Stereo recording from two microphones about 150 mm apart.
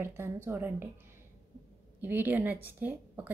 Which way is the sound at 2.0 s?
10° right (ahead or behind).